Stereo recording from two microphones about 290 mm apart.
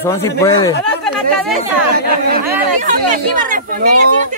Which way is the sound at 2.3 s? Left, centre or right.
Right.